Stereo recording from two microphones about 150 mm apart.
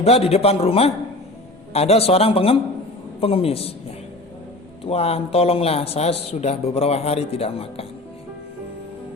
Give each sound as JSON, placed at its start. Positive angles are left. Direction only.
{"t": 0.0, "sound": "speech", "side_deg": 40}
{"t": 4.9, "sound": "speech", "side_deg": 45}